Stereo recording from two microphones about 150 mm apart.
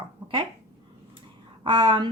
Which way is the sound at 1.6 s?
30° right (ahead or behind).